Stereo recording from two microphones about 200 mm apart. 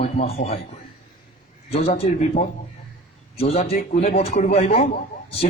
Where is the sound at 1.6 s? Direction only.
30° left (ahead or behind).